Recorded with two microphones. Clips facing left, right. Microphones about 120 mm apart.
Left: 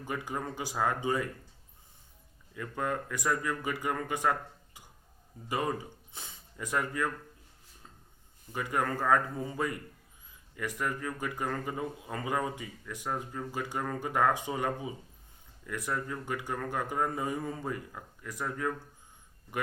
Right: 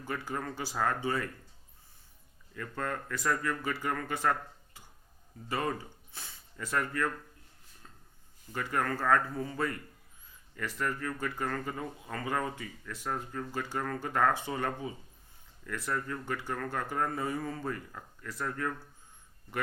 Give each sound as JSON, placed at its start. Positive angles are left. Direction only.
{"t": 0.0, "sound": "speech", "side_deg": 15}
{"t": 2.6, "sound": "speech", "side_deg": 15}
{"t": 8.5, "sound": "speech", "side_deg": 15}